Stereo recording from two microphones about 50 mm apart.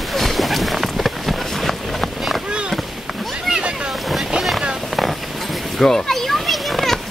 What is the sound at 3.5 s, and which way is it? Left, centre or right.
Boat, right.